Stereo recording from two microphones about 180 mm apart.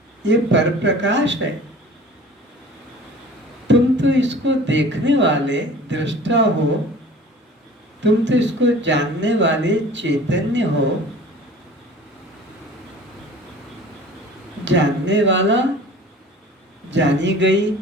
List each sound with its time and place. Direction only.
0.3 s speech: 85° right
3.7 s speech: 90° right
8.0 s speech: 90° right
14.6 s speech: 85° right
16.9 s speech: 85° right